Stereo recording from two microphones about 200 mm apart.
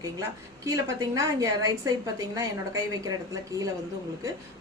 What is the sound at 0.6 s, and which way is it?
A woman's voice, 15° right (ahead or behind).